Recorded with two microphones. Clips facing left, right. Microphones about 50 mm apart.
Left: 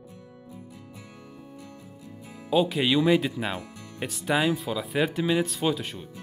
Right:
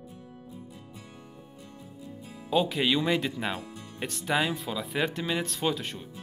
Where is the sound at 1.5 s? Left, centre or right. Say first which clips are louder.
Left 3 dB; left.